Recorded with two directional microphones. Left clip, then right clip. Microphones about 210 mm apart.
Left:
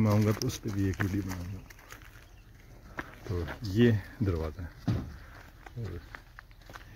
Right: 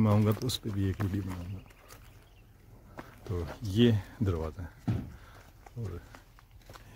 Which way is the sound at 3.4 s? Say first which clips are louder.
Left 1 dB; 10° right (ahead or behind).